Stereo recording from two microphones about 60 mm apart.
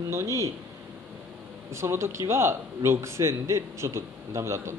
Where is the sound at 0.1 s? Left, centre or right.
Right.